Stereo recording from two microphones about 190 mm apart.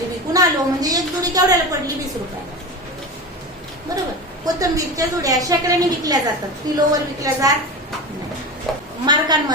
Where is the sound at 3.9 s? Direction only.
20° right (ahead or behind).